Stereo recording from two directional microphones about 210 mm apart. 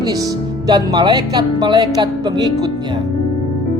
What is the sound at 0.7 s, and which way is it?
Speech, 20° right (ahead or behind).